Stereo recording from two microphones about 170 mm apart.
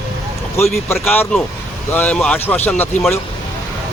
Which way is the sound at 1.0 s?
5° left (ahead or behind).